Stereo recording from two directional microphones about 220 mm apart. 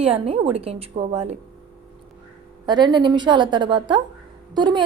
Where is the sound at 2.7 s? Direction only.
20° right (ahead or behind).